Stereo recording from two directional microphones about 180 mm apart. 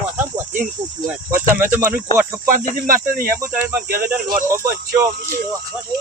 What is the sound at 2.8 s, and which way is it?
Speech, 50° right (ahead or behind).